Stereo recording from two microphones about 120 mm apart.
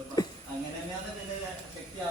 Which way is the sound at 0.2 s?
30° left (ahead or behind).